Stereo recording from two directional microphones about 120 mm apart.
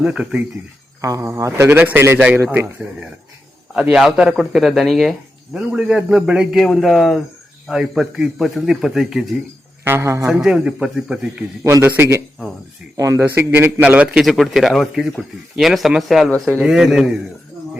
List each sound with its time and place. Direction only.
0.0 s speech: 5° right (ahead or behind)
1.0 s a man's voice: 25° right (ahead or behind); by 9.3 s 5° right (ahead or behind)
9.8 s a man's voice: 20° right (ahead or behind)
10.4 s speech: 5° right (ahead or behind)
11.6 s a man's voice: 25° right (ahead or behind)
13.2 s speech: 15° right (ahead or behind)